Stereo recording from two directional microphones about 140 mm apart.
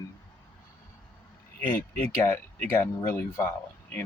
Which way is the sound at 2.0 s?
15° left (ahead or behind).